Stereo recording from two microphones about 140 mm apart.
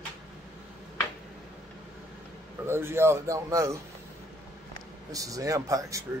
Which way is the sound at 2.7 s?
15° right (ahead or behind).